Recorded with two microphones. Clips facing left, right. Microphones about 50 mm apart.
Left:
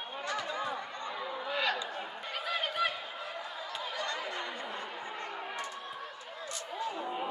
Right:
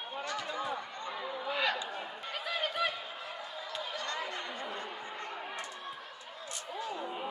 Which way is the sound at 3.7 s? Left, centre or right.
Centre.